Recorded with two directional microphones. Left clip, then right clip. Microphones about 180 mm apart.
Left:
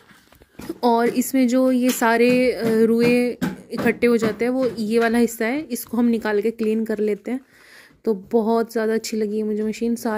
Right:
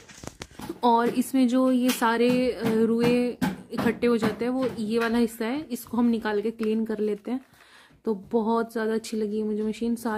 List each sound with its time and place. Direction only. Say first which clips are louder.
0.7 s a woman's voice: left 3 dB; 15° left (ahead or behind)